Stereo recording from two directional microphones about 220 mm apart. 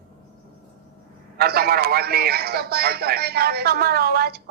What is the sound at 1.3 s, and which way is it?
A man's voice, 45° right (ahead or behind).